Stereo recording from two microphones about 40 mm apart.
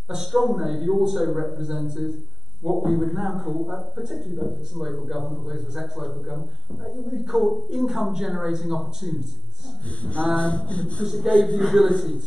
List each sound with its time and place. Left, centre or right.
0.1 s a man's voice: centre
9.8 s a sound: left
11.2 s speech: left
11.6 s a man's voice: centre